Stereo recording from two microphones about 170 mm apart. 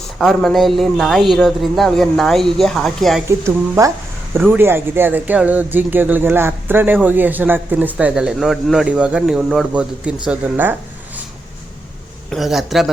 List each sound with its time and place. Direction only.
0.2 s a man's voice: centre (ahead or behind)
3.2 s speech: 15° right (ahead or behind)
12.3 s a man's voice: centre (ahead or behind)